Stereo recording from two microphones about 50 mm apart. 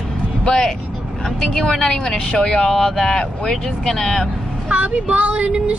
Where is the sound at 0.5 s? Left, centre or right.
Centre.